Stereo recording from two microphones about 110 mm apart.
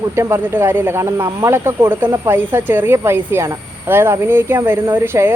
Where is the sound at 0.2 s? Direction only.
25° right (ahead or behind).